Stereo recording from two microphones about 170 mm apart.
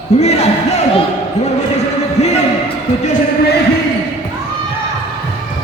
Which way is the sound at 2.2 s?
40° left (ahead or behind).